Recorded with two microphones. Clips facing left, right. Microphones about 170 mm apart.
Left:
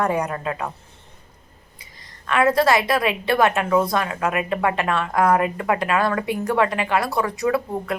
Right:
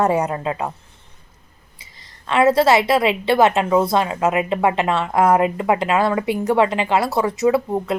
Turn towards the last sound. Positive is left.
turn(degrees=-25)  # may be behind; listen again after turning